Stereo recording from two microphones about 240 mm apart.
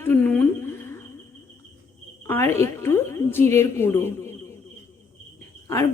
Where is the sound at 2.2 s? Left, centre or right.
Centre.